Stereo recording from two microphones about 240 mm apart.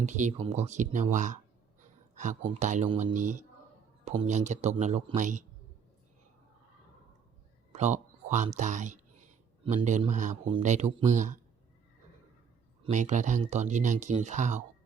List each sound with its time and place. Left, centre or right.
0.0 s speech: right
4.2 s speech: right
7.7 s speech: right
12.8 s speech: right